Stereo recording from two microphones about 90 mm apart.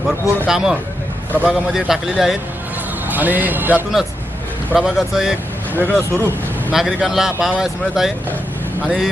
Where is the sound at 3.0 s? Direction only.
20° right (ahead or behind).